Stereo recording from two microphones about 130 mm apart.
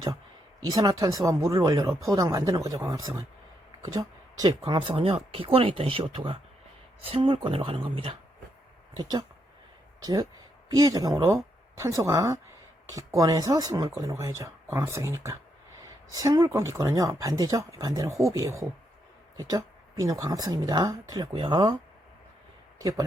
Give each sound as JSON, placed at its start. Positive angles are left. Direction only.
{"t": 0.7, "sound": "speech", "side_deg": -30}
{"t": 10.0, "sound": "speech", "side_deg": -30}
{"t": 22.8, "sound": "speech", "side_deg": -30}